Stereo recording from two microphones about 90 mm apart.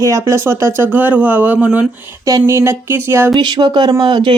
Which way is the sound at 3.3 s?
55° right (ahead or behind).